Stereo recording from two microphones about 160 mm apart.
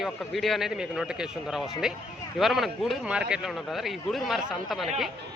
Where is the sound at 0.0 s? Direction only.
Centre (ahead or behind).